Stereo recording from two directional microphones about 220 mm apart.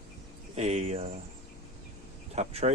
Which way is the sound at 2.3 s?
30° right (ahead or behind).